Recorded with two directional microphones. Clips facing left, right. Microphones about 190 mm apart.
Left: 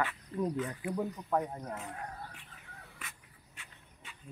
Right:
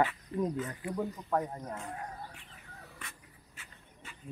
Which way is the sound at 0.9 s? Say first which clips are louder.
Right 1 dB; 10° left (ahead or behind).